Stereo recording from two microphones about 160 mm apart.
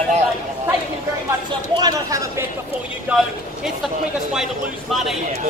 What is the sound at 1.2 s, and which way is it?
Speech, 25° right (ahead or behind).